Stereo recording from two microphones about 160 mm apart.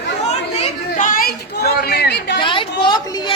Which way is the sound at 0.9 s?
55° left (ahead or behind).